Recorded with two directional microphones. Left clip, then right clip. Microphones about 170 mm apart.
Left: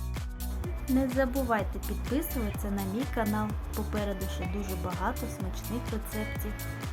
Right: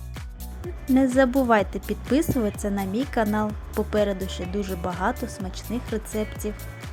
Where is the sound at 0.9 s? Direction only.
35° right (ahead or behind).